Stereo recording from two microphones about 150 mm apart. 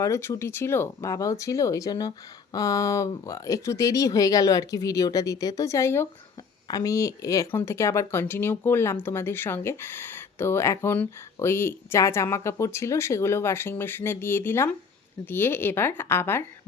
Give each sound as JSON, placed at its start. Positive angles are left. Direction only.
{"t": 0.0, "sound": "speech", "side_deg": 15}